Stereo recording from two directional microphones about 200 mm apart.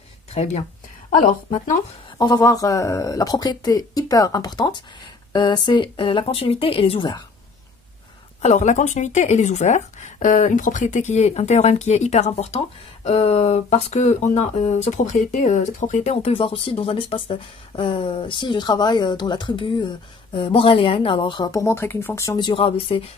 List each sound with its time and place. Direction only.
0.3 s speech: 35° left (ahead or behind)
2.1 s speech: 20° left (ahead or behind)
8.4 s speech: 35° left (ahead or behind); by 22.5 s 15° left (ahead or behind)
22.5 s speech: 25° left (ahead or behind)